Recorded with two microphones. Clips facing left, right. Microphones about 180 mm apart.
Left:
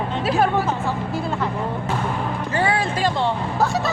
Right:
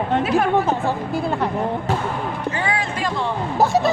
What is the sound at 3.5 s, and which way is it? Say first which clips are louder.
Speech: right 7 dB; 20° right (ahead or behind).